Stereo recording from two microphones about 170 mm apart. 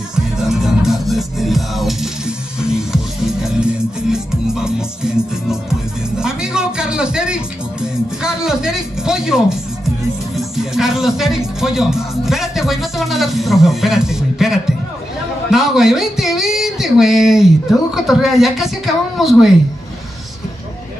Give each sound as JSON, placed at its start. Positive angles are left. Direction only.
{"t": 0.1, "sound": "music", "side_deg": 0}
{"t": 10.3, "sound": "speech", "side_deg": 0}